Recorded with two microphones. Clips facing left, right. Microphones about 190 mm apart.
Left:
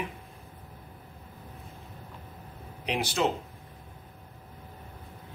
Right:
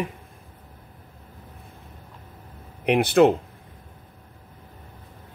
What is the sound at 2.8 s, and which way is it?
Speech, 55° right (ahead or behind).